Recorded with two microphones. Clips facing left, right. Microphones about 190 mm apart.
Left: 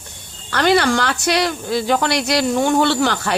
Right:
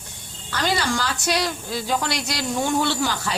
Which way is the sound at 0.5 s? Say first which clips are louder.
Left 8 dB; 65° left (ahead or behind).